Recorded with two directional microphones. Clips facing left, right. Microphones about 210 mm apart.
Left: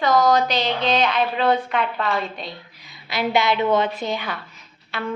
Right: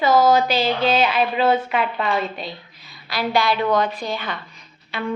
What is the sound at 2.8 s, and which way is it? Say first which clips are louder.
A woman's voice: left 1 dB; 20° left (ahead or behind).